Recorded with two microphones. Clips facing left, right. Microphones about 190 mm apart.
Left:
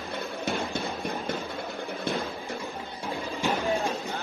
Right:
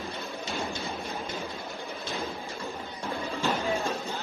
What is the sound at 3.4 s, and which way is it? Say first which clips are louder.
Music: left 2 dB; 15° left (ahead or behind).